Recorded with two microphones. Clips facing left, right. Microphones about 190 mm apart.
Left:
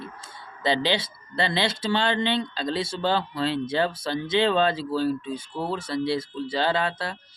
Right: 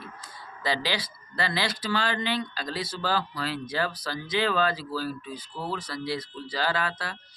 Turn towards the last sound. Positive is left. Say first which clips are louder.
# left 4 dB
turn(degrees=25)  # may be behind; listen again after turning